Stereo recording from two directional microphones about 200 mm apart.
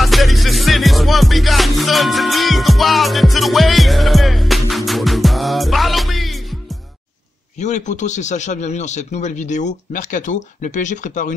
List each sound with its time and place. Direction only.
0.0 s music: centre (ahead or behind)
7.5 s a man's voice: 35° left (ahead or behind)